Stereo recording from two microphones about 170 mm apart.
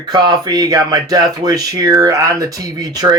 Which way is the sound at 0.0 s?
25° right (ahead or behind).